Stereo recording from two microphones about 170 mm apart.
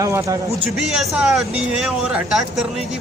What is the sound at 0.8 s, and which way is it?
Speech, 5° right (ahead or behind).